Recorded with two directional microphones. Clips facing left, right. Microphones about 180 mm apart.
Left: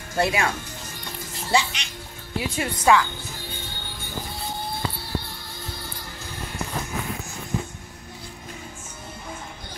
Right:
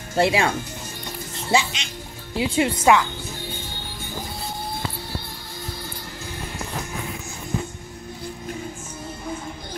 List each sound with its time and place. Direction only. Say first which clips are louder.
0.1 s speech: right 4 dB; 25° right (ahead or behind)
1.5 s speech: right 2 dB; 20° right (ahead or behind)